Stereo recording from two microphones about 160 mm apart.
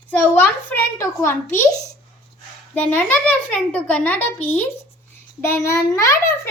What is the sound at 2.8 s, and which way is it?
A child's voice, 10° left (ahead or behind).